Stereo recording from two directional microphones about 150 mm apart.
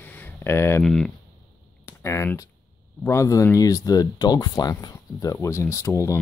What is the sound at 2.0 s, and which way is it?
Speech, 20° left (ahead or behind).